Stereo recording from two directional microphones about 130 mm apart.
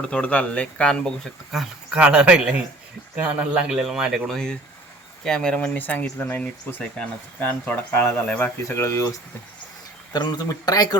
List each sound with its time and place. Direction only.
0.1 s speech: 10° left (ahead or behind); by 10.8 s 30° left (ahead or behind)